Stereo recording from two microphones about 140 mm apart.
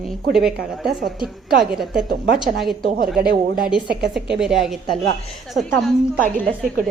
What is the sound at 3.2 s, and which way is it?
Speech, 90° right.